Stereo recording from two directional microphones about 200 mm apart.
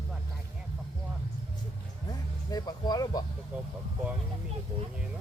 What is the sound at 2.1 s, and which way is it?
Speech, 20° left (ahead or behind).